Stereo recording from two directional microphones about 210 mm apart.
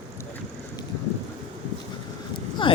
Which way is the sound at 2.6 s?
25° left (ahead or behind).